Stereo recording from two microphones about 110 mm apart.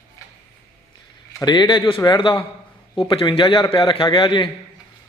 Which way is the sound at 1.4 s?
40° left (ahead or behind).